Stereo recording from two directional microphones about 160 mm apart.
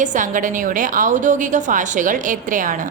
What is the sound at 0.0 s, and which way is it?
A woman's voice, 55° right (ahead or behind).